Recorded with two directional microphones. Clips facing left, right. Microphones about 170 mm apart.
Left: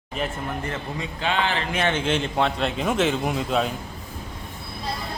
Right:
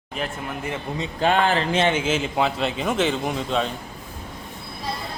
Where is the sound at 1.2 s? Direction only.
45° right (ahead or behind).